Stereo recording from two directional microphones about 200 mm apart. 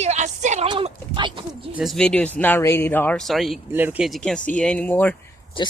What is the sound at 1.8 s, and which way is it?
Speech, centre (ahead or behind).